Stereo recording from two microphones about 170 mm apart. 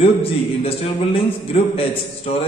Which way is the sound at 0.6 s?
35° left (ahead or behind).